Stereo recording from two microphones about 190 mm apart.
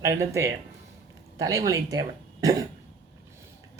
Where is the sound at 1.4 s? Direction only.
20° right (ahead or behind).